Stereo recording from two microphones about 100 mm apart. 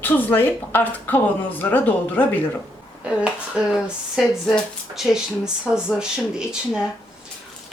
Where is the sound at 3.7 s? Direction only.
Centre (ahead or behind).